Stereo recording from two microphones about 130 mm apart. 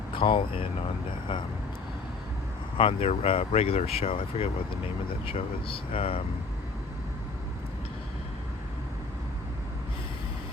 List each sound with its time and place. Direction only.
0.1 s speech: 40° left (ahead or behind)
2.7 s speech: 45° left (ahead or behind)